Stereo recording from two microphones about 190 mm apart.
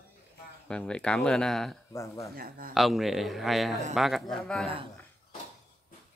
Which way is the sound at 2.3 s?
50° right (ahead or behind).